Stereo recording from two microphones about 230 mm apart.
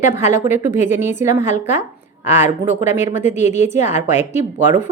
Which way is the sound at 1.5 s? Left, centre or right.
Left.